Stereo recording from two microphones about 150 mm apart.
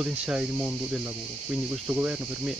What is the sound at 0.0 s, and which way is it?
Speech, 5° right (ahead or behind).